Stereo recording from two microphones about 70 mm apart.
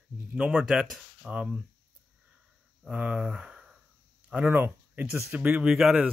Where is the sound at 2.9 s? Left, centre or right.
Centre.